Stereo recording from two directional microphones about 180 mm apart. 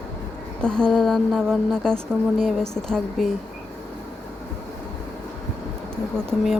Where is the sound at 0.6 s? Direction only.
5° left (ahead or behind).